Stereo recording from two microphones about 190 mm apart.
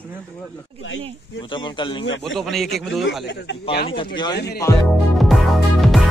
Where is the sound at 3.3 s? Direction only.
65° left (ahead or behind).